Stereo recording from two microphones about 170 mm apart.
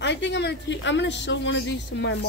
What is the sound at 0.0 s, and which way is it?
A woman's voice, 90° left.